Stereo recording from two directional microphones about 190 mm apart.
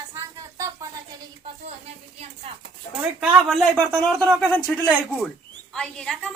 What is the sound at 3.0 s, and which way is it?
A woman's voice, 5° right (ahead or behind).